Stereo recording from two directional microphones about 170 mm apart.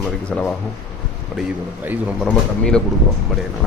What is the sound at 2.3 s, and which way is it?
Speech, 5° left (ahead or behind).